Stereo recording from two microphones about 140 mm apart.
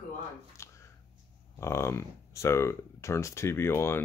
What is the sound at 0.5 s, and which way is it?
Shuffling cards, 20° left (ahead or behind).